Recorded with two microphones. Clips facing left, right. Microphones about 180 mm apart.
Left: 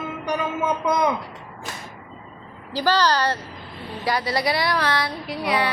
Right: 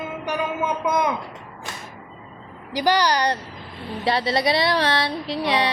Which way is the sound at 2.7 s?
15° right (ahead or behind).